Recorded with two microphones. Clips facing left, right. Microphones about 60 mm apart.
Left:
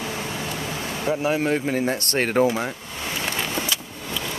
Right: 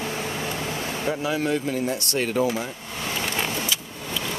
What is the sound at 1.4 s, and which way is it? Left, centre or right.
Speech, left.